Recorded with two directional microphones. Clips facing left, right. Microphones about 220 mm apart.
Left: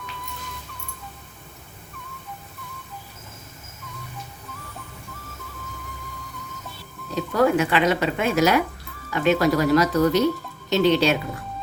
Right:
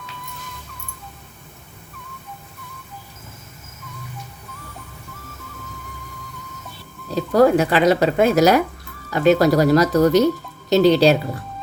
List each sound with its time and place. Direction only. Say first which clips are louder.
7.2 s speech: right 5 dB; 35° right (ahead or behind)